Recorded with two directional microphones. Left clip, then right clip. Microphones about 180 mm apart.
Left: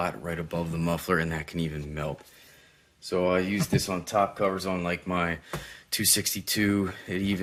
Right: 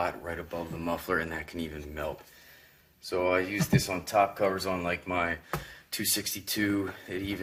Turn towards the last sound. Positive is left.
turn(degrees=60)  # may be behind; listen again after turning